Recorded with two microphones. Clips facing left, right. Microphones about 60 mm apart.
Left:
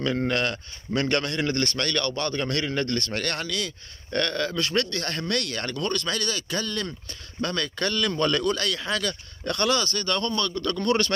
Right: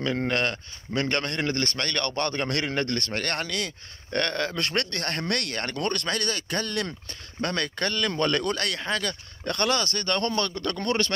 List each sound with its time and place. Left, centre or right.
0.2 s a man's voice: right
2.0 s a man's voice: right
8.8 s a man's voice: right
10.2 s a man's voice: right
10.6 s a man's voice: right